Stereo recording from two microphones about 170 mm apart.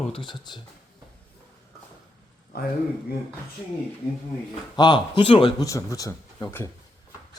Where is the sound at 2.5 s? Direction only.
70° left (ahead or behind).